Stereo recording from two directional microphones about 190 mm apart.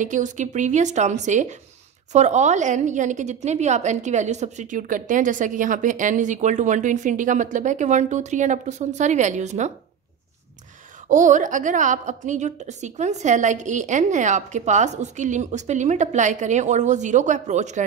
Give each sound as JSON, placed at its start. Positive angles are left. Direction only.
{"t": 0.0, "sound": "a woman's voice", "side_deg": -40}
{"t": 11.1, "sound": "a woman's voice", "side_deg": -40}